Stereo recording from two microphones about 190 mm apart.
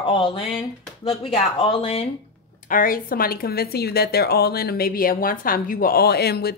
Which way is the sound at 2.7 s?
45° left (ahead or behind).